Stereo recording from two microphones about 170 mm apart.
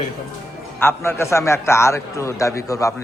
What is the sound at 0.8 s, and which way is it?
A man's voice, 15° left (ahead or behind).